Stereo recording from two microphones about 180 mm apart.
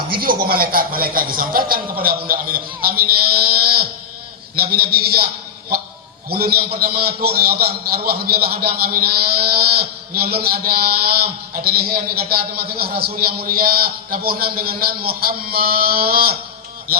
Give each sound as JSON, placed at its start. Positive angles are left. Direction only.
{"t": 0.1, "sound": "a man's voice", "side_deg": -55}
{"t": 6.3, "sound": "a man's voice", "side_deg": -60}